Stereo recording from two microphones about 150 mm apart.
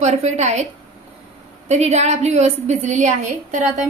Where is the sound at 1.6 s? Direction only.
50° right (ahead or behind).